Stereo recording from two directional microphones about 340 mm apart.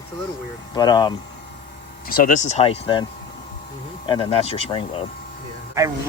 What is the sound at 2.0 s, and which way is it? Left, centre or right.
Speech, left.